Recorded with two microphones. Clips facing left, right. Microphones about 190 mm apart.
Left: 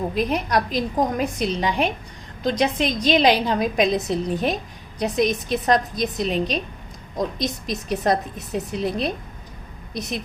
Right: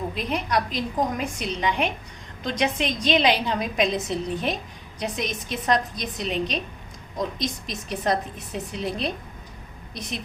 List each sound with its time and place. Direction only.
0.1 s a woman's voice: 40° left (ahead or behind)